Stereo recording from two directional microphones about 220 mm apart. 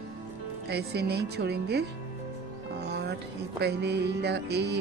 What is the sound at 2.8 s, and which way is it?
Music, 50° right (ahead or behind).